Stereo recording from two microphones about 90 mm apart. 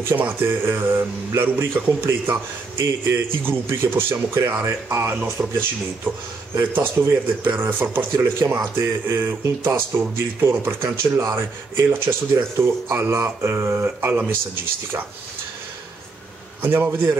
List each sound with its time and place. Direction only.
0.1 s speech: 20° right (ahead or behind)
16.6 s speech: 25° right (ahead or behind)